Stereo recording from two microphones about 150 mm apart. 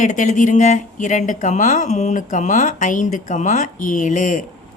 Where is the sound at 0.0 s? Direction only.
55° left (ahead or behind).